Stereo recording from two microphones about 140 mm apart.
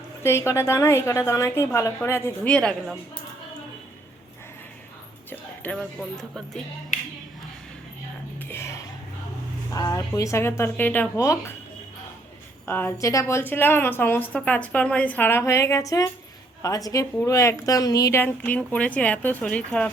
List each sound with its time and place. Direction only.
0.2 s a woman's voice: 20° left (ahead or behind)
2.5 s speech: 5° left (ahead or behind)
5.7 s speech: 5° left (ahead or behind)
8.4 s music: 15° left (ahead or behind)
9.7 s a woman's voice: 25° left (ahead or behind)
12.6 s a woman's voice: 15° left (ahead or behind)